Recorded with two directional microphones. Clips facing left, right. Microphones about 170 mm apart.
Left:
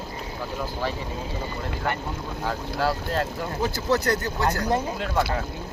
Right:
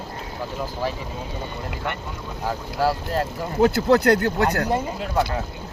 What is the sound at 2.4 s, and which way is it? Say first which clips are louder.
Speech: right 3 dB; 10° right (ahead or behind).